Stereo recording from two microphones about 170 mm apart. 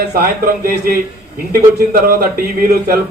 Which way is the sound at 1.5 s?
60° right (ahead or behind).